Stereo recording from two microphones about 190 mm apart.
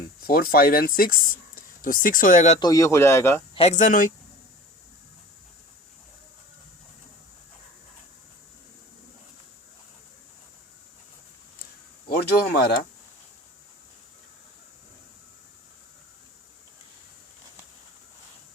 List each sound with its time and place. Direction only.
0.2 s speech: 50° left (ahead or behind)
2.6 s speech: 20° left (ahead or behind)
3.5 s speech: 35° left (ahead or behind)
12.0 s a sound: 60° left (ahead or behind)